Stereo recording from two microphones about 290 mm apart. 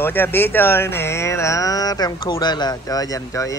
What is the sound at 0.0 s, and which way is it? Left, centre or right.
Speech, centre.